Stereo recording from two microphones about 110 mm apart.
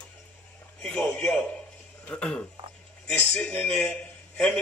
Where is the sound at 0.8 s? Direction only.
5° left (ahead or behind).